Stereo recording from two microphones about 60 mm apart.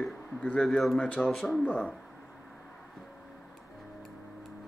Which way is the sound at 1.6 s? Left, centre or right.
Left.